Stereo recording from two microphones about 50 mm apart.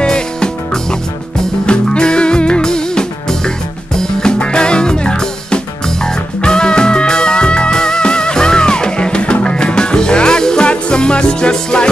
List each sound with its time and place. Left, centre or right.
0.0 s music: centre